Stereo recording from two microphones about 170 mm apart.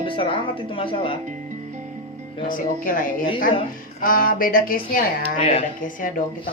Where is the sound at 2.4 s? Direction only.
55° left (ahead or behind).